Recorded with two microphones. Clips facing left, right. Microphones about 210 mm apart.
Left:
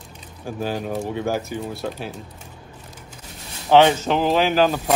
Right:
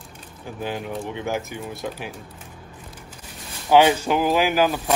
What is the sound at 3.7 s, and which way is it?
Speech, 10° right (ahead or behind).